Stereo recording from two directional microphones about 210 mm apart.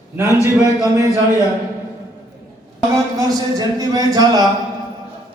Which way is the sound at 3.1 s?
15° right (ahead or behind).